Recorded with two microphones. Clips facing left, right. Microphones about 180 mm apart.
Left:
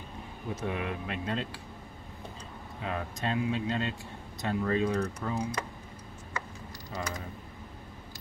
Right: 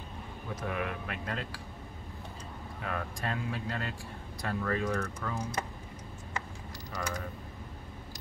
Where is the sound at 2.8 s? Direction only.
25° left (ahead or behind).